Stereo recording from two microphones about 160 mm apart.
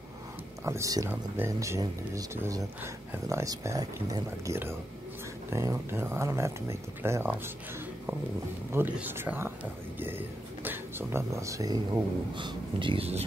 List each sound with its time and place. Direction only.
0.7 s speech: 20° right (ahead or behind)
8.7 s speech: 10° right (ahead or behind); by 13.2 s 35° right (ahead or behind)